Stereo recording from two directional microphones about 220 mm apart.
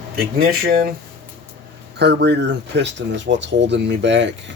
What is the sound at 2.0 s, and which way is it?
Speech, 50° right (ahead or behind).